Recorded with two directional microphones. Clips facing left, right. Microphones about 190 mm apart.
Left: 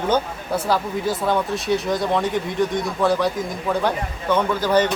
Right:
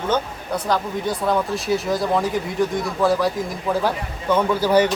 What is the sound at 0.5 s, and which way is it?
Speech, 5° left (ahead or behind).